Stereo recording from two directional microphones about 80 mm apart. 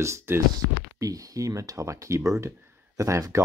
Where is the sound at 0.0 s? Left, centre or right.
Right.